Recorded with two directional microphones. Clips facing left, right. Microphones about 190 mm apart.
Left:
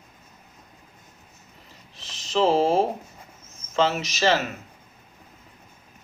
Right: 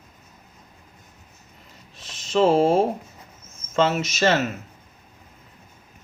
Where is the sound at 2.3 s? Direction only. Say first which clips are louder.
Right 3 dB; 50° right (ahead or behind).